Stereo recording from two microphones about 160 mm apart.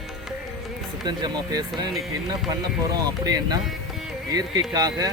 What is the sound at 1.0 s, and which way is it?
Speech, 25° right (ahead or behind).